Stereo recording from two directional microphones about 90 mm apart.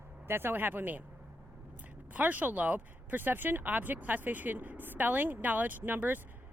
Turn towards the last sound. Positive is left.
turn(degrees=-20)  # may be behind; listen again after turning